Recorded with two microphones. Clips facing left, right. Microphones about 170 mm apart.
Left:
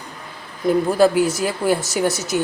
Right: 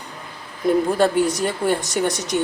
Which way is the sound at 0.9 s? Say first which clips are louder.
Left 2 dB; 5° left (ahead or behind).